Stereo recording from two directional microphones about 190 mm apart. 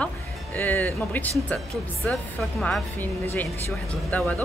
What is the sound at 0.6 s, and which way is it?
Speech, 10° left (ahead or behind).